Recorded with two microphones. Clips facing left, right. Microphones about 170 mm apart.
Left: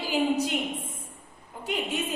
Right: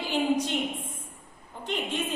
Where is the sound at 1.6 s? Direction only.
10° left (ahead or behind).